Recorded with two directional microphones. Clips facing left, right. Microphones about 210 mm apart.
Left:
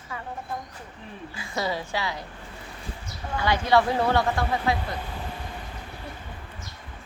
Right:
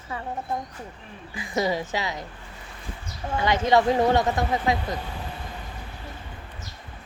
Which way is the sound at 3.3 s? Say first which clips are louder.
Right 1 dB; 20° right (ahead or behind).